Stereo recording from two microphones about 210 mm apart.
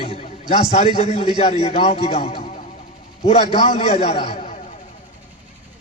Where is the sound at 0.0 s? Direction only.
25° left (ahead or behind).